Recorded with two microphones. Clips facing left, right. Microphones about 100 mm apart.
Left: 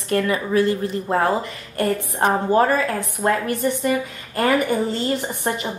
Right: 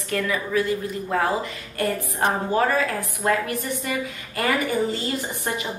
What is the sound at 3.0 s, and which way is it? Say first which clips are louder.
Speech: left 2 dB; 25° left (ahead or behind).